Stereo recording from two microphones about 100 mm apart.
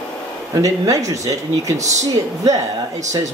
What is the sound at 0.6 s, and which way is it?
A woman's voice, 35° right (ahead or behind).